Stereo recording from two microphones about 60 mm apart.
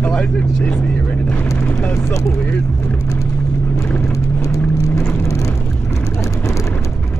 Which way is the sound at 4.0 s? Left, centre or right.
Left.